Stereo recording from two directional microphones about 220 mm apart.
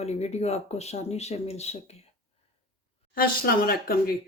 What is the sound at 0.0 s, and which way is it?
Speech, 30° left (ahead or behind).